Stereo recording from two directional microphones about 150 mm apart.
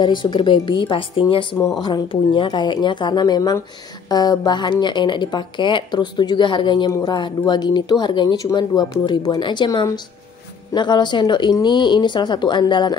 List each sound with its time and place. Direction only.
0.0 s speech: 30° left (ahead or behind)